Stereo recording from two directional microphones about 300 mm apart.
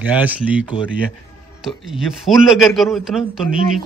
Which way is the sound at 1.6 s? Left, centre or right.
Centre.